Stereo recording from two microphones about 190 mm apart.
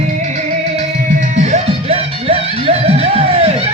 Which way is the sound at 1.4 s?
40° right (ahead or behind).